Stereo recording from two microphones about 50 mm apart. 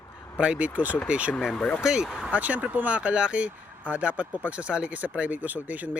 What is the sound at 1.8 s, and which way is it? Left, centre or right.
Speech, centre.